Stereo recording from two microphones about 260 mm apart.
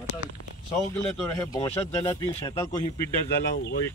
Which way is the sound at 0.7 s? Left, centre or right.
Centre.